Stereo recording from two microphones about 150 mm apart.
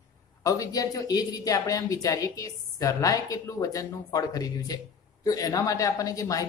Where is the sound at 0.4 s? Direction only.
20° left (ahead or behind).